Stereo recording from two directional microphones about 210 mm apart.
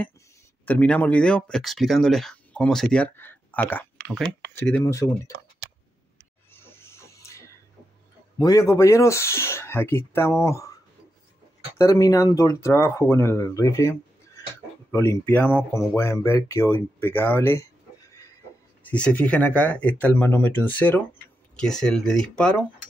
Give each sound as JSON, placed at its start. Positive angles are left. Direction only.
{"t": 0.7, "sound": "speech", "side_deg": 5}
{"t": 6.5, "sound": "pig", "side_deg": 10}
{"t": 8.4, "sound": "speech", "side_deg": 15}
{"t": 11.8, "sound": "speech", "side_deg": 15}
{"t": 18.8, "sound": "speech", "side_deg": 5}